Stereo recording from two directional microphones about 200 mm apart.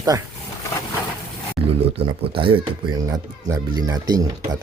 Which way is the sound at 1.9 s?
25° right (ahead or behind).